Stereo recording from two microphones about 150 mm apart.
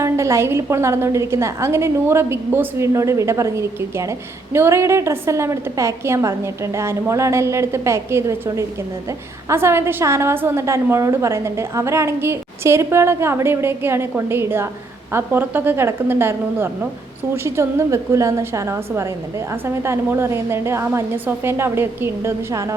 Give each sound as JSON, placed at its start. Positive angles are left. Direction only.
{"t": 0.0, "sound": "a woman's voice", "side_deg": -20}